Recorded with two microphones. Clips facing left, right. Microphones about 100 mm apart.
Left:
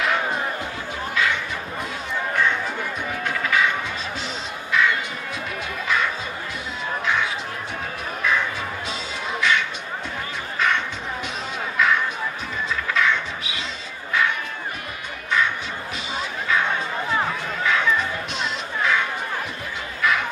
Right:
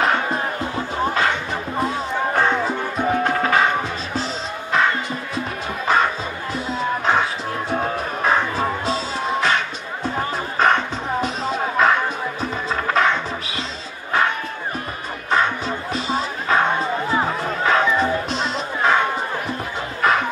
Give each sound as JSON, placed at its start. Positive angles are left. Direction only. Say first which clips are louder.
{"t": 0.0, "sound": "music", "louder": "right 3 dB", "side_deg": -40}
{"t": 14.1, "sound": "crowd", "louder": "right 3 dB", "side_deg": -35}
{"t": 15.2, "sound": "music", "louder": "right 4 dB", "side_deg": -40}
{"t": 20.0, "sound": "a sound", "louder": "right 4 dB", "side_deg": -40}